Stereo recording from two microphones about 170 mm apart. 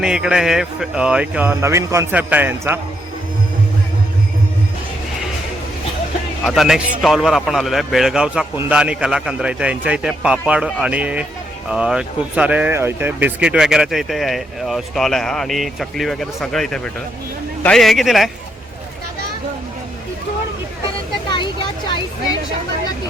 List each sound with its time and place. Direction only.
0.0 s speech: 5° right (ahead or behind)
6.4 s speech: centre (ahead or behind)
21.2 s a sound: 30° left (ahead or behind)